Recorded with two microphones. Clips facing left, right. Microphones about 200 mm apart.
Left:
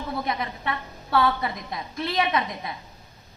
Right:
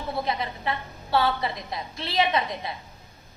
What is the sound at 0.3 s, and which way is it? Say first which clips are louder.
A woman's voice: even; 30° right (ahead or behind).